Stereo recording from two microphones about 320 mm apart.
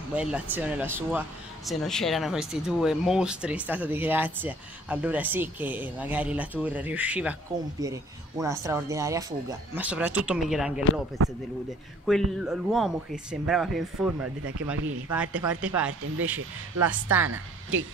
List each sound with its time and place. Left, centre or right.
0.1 s speech: centre
12.1 s speech: centre
17.3 s a woman's voice: right